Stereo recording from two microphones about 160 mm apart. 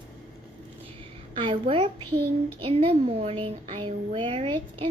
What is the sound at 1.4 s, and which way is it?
A woman's voice, 35° right (ahead or behind).